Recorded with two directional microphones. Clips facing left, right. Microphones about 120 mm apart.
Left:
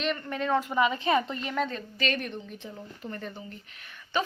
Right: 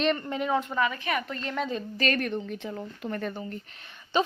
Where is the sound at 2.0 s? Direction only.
50° right (ahead or behind).